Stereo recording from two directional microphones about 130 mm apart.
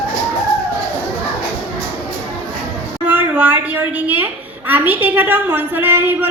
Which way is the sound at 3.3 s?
10° right (ahead or behind).